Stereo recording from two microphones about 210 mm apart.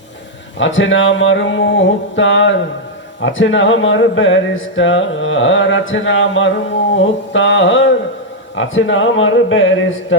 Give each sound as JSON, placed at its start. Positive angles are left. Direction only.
{"t": 0.6, "sound": "speech", "side_deg": 65}